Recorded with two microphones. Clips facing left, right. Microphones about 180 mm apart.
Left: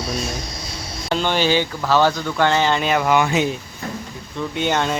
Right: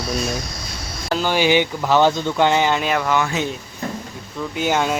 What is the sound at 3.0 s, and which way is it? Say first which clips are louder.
Speech: left 3 dB; 15° left (ahead or behind).